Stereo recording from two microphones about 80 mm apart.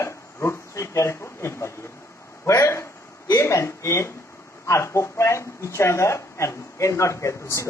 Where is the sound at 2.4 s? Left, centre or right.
Left.